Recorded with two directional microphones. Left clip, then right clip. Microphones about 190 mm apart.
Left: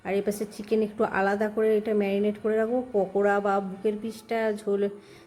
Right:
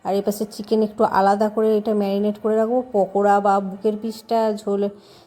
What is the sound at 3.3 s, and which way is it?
Speech, 5° left (ahead or behind).